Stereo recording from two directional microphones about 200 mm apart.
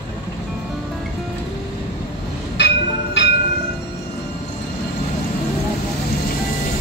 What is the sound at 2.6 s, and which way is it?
Music, 60° left (ahead or behind).